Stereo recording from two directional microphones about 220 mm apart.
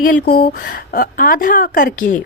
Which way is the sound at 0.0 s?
40° left (ahead or behind).